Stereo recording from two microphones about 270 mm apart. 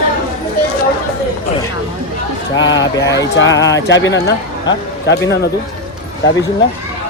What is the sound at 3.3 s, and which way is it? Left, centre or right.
Speech, left.